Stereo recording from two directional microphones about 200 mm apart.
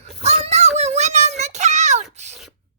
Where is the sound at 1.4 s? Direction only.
35° right (ahead or behind).